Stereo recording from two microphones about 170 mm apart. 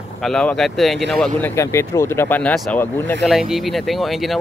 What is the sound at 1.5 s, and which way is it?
Speech, 15° left (ahead or behind).